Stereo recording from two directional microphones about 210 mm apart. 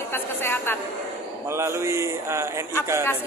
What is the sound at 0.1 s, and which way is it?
Speech, 10° left (ahead or behind).